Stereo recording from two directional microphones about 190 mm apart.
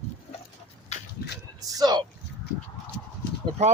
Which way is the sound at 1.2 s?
55° left (ahead or behind).